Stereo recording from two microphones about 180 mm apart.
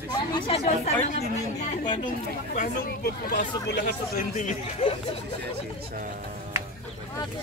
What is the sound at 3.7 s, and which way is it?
Speech, 65° left (ahead or behind).